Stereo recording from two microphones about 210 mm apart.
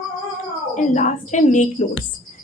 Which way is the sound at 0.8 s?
35° left (ahead or behind).